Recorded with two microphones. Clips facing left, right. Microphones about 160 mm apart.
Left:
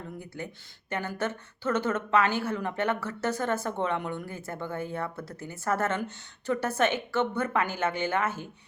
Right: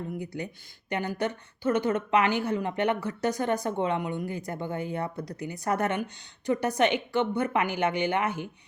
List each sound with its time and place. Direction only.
0.2 s speech: 15° right (ahead or behind)